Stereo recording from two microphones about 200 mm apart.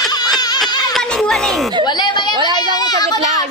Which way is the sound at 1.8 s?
20° left (ahead or behind).